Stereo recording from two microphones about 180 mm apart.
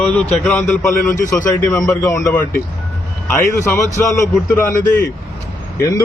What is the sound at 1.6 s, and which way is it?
A man's voice, 15° left (ahead or behind).